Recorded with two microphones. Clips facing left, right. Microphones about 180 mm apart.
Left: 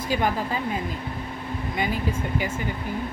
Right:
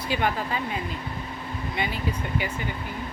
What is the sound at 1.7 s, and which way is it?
Speech, 45° left (ahead or behind).